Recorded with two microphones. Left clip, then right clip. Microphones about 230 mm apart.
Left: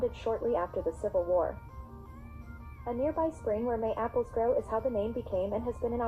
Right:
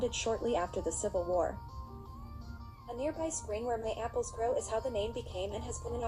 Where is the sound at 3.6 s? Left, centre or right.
Right.